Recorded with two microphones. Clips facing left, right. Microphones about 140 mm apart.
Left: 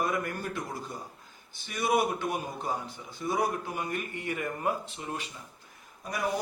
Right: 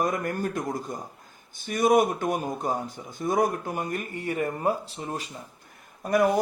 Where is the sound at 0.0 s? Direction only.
45° right (ahead or behind).